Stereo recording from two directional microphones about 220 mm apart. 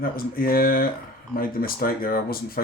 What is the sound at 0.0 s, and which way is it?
Speech, 40° left (ahead or behind).